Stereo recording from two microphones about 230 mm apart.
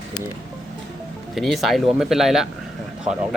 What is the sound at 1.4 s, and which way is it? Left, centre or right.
Speech, centre.